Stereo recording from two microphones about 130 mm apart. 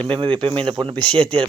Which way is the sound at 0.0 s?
45° right (ahead or behind).